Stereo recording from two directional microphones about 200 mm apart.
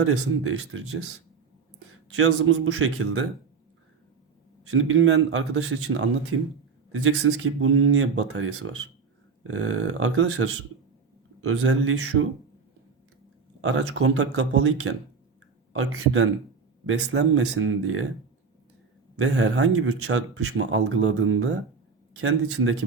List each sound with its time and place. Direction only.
0.0 s speech: 90° right
2.1 s speech: 90° right
4.6 s speech: 90° right
7.6 s speech: 90° right
13.6 s speech: 90° right
16.8 s speech: 70° right (ahead or behind); by 18.0 s 90° right
19.1 s speech: 85° right